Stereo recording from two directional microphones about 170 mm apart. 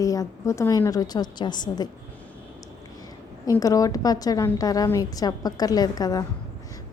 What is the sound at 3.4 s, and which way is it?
A woman's voice, 20° left (ahead or behind).